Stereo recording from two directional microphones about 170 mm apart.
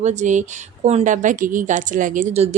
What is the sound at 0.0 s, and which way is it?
Speech, 45° right (ahead or behind).